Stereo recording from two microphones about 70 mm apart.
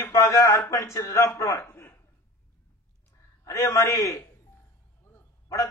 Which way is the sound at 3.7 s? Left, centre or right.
Left.